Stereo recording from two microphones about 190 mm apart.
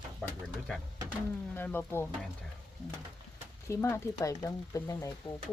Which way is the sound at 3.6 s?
15° left (ahead or behind).